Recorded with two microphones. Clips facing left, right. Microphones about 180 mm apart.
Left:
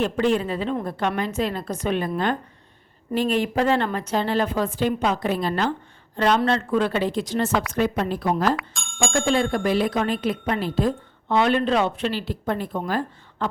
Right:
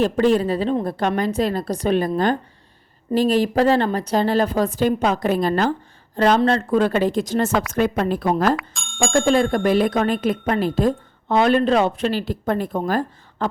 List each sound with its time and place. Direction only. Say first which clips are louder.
0.0 s a woman's voice: right 4 dB; 35° right (ahead or behind)
8.5 s speech: right 3 dB; centre (ahead or behind)
9.1 s speech: right 5 dB; 45° right (ahead or behind)